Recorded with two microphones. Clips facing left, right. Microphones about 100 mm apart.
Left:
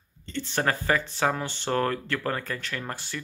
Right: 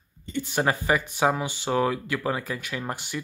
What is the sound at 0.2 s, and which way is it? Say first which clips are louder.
Speech: right 2 dB; 15° right (ahead or behind).